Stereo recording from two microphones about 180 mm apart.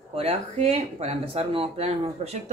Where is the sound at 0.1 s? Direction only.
35° right (ahead or behind).